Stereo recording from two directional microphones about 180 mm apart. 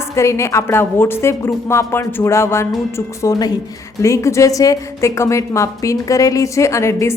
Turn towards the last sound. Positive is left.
turn(degrees=15)  # may be behind; listen again after turning